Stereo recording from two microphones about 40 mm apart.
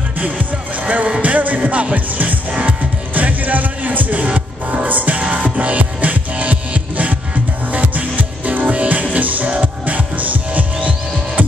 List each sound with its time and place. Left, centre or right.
0.8 s speech: right
1.2 s music: right
4.3 s music: right
4.8 s music: right